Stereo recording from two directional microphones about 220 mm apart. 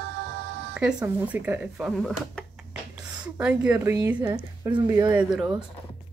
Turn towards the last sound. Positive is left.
turn(degrees=-5)  # may be behind; listen again after turning